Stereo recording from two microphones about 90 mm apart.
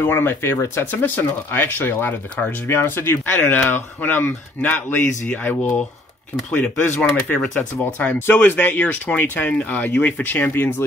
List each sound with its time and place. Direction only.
0.0 s speech: 25° left (ahead or behind); by 7.5 s 10° left (ahead or behind)
8.0 s speech: 20° left (ahead or behind)